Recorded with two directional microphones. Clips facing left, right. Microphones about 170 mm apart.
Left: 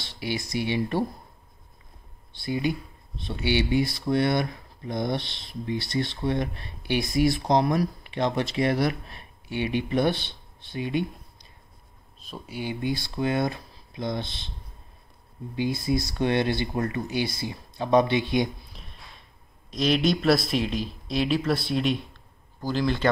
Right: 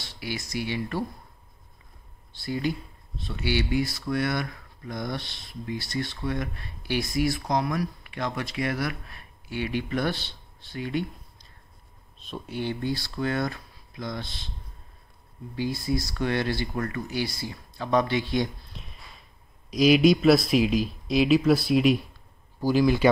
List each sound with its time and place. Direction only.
0.0 s speech: 25° left (ahead or behind)
2.4 s speech: 20° left (ahead or behind)
12.3 s speech: 5° left (ahead or behind); by 14.5 s 25° left (ahead or behind)
15.5 s speech: 20° left (ahead or behind)
18.7 s a sound: centre (ahead or behind)
19.8 s speech: 5° right (ahead or behind)